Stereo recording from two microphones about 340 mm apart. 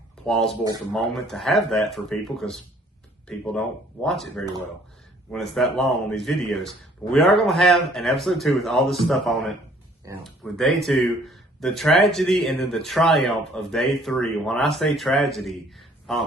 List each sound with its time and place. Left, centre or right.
0.3 s speech: centre
5.5 s speech: centre